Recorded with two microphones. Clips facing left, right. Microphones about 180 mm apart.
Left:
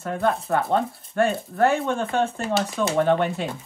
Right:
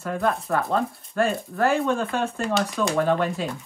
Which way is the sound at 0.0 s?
25° left (ahead or behind).